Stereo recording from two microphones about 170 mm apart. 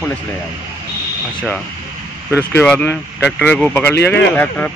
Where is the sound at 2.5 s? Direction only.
10° left (ahead or behind).